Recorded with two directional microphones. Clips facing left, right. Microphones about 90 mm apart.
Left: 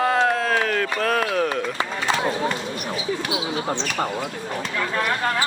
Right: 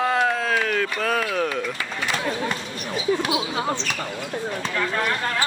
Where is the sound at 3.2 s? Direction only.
30° right (ahead or behind).